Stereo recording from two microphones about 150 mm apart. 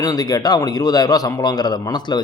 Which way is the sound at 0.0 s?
25° left (ahead or behind).